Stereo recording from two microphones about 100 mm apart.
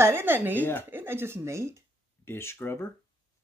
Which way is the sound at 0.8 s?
20° right (ahead or behind).